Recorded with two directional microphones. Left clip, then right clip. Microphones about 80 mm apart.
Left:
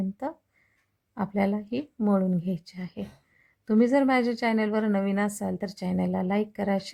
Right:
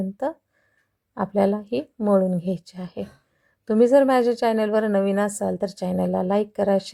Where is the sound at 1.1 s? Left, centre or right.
Right.